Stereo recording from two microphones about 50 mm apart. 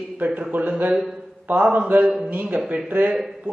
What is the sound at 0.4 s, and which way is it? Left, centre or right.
A man's voice, right.